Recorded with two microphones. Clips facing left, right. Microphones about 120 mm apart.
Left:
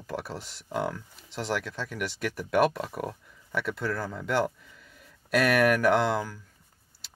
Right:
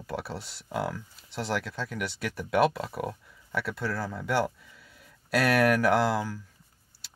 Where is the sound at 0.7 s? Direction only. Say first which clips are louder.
Left 1 dB; 5° right (ahead or behind).